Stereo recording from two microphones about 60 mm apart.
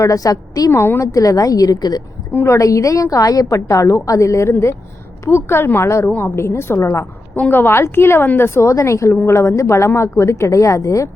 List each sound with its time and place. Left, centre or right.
0.0 s a woman's voice: left
0.7 s a woman's voice: left
1.0 s a woman's voice: left
2.3 s a woman's voice: left
2.6 s a woman's voice: left
6.1 s a woman's voice: left
6.3 s a woman's voice: left
7.5 s a woman's voice: left